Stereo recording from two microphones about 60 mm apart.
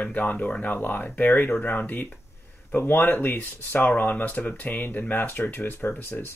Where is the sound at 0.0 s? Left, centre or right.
Left.